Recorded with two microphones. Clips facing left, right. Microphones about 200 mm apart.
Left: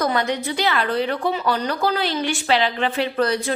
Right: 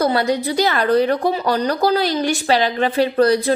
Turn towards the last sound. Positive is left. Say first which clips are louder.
# right 6 dB
turn(degrees=-35)  # may be behind; listen again after turning